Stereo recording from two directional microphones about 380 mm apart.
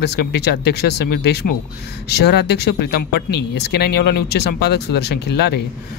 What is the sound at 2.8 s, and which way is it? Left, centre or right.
Speech, left.